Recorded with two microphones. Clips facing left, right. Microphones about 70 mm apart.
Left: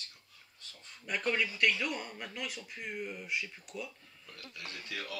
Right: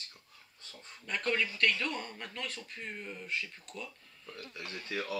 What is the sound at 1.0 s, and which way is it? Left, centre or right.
Speech, centre.